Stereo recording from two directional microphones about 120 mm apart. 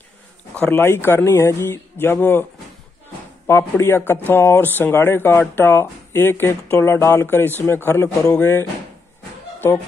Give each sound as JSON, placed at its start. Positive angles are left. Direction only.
{"t": 0.6, "sound": "speech", "side_deg": 15}
{"t": 3.4, "sound": "speech", "side_deg": 20}